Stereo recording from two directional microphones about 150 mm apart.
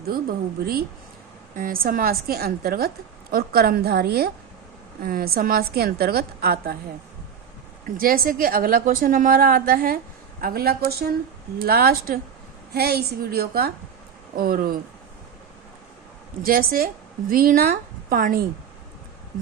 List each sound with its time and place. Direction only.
0.1 s a woman's voice: 85° right
1.5 s a woman's voice: 70° right (ahead or behind); by 4.3 s 90° right
5.0 s a woman's voice: 80° right
7.9 s a woman's voice: 75° right (ahead or behind)
10.4 s a woman's voice: 90° right
12.7 s a woman's voice: 90° right
14.3 s a woman's voice: 75° right (ahead or behind)
16.4 s a woman's voice: 75° right (ahead or behind)